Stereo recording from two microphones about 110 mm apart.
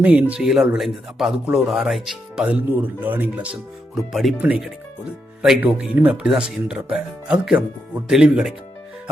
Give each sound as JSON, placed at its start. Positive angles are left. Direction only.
{"t": 0.0, "sound": "speech", "side_deg": -15}
{"t": 2.6, "sound": "speech", "side_deg": -15}
{"t": 4.1, "sound": "speech", "side_deg": 0}
{"t": 4.4, "sound": "speech", "side_deg": -15}